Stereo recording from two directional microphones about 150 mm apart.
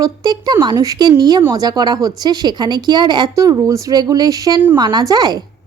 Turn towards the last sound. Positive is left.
turn(degrees=-25)  # may be behind; listen again after turning